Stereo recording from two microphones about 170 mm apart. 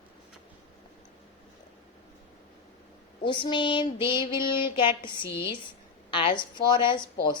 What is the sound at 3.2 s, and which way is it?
Child singing, 30° left (ahead or behind).